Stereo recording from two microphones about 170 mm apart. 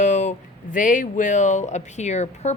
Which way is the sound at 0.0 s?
45° left (ahead or behind).